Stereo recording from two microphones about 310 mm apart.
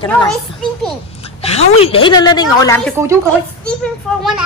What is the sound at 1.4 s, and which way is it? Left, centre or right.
A woman's voice, centre.